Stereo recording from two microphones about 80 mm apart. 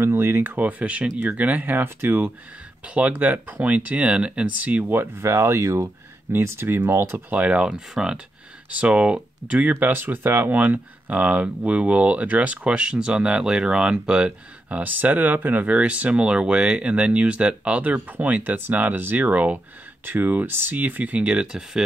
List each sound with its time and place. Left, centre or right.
0.0 s speech: right
5.0 s speech: right; by 21.8 s centre